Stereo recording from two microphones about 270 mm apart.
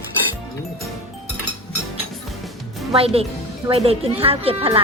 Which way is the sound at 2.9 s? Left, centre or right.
Right.